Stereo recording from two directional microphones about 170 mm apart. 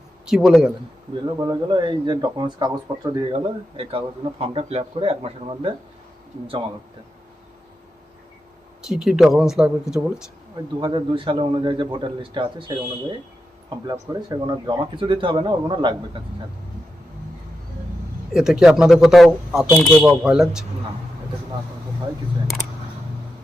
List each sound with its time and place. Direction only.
0.3 s speech: centre (ahead or behind)
1.1 s a man's voice: 25° right (ahead or behind)
8.9 s speech: 5° right (ahead or behind)
10.8 s a man's voice: 25° right (ahead or behind)
18.3 s speech: 5° right (ahead or behind)